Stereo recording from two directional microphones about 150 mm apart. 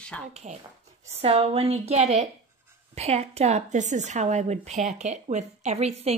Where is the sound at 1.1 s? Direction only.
40° right (ahead or behind).